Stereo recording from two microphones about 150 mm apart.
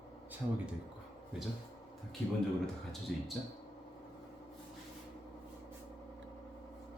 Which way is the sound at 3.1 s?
Centre (ahead or behind).